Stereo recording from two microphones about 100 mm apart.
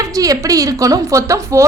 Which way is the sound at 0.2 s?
35° right (ahead or behind).